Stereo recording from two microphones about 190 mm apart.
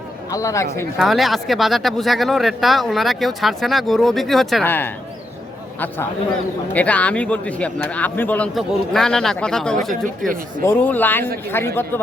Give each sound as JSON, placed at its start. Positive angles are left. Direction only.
{"t": 0.3, "sound": "speech", "side_deg": 15}
{"t": 0.9, "sound": "speech", "side_deg": 0}
{"t": 6.7, "sound": "speech", "side_deg": 5}